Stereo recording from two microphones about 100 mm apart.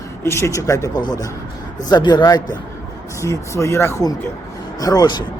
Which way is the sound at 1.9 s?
45° left (ahead or behind).